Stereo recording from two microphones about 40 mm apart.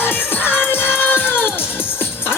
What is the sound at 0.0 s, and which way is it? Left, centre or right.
Music, left.